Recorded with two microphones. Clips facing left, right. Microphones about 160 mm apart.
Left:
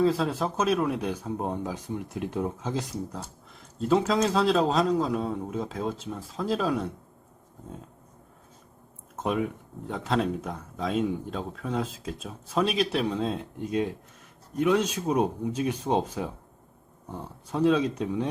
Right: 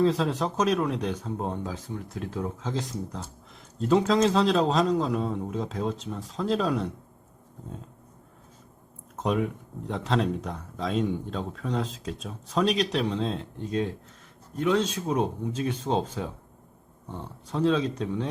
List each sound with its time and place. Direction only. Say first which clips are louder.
0.0 s speech: even; 5° left (ahead or behind)
9.1 s speech: right 1 dB; 5° left (ahead or behind)